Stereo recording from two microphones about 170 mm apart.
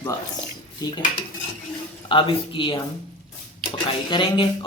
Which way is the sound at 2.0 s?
30° left (ahead or behind).